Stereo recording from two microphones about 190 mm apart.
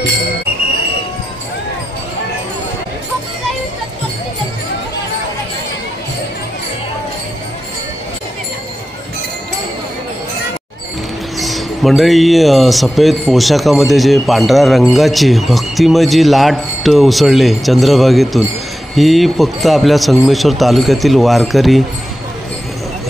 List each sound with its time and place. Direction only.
11.3 s speech: centre (ahead or behind)